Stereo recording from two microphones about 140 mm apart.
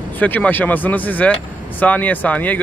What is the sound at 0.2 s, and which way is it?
Speech, 10° left (ahead or behind).